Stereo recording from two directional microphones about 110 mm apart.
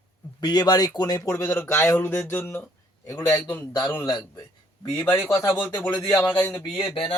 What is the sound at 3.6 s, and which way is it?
Speech, 35° left (ahead or behind).